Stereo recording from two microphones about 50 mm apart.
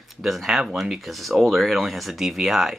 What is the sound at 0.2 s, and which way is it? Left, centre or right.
Speech, centre.